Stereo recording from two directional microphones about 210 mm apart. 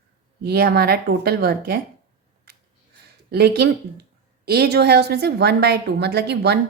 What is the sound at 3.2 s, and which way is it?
A woman's voice, 50° right (ahead or behind).